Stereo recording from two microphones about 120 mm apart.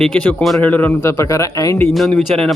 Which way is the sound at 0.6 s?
15° left (ahead or behind).